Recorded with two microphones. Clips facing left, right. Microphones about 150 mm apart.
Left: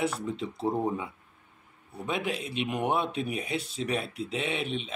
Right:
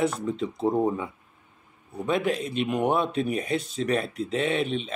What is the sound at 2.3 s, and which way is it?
Speech, 5° left (ahead or behind).